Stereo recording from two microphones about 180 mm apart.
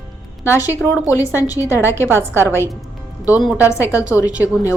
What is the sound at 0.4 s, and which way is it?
Speech, 15° left (ahead or behind).